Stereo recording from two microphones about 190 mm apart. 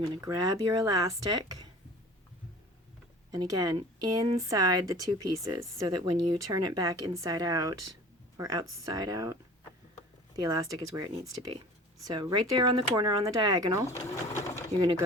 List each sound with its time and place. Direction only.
0.2 s a woman's voice: 20° right (ahead or behind)
3.3 s a woman's voice: 20° right (ahead or behind)